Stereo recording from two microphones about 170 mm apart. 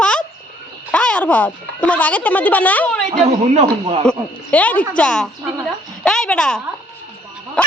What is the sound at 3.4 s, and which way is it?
Speech, 35° right (ahead or behind).